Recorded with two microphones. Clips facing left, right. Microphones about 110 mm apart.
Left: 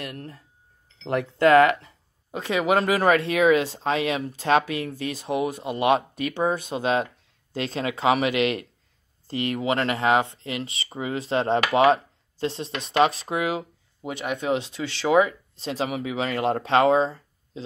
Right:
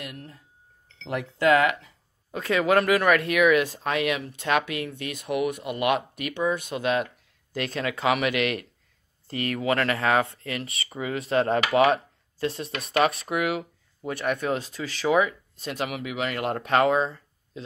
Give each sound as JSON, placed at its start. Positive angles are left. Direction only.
{"t": 0.0, "sound": "speech", "side_deg": 40}
{"t": 2.3, "sound": "speech", "side_deg": 20}